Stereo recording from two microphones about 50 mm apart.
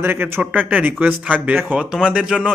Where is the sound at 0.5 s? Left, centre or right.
Right.